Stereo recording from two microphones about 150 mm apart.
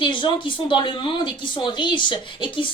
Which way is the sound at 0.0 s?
35° left (ahead or behind).